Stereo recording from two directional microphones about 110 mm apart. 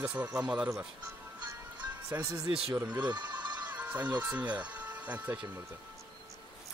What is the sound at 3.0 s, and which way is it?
Bleat, 40° right (ahead or behind).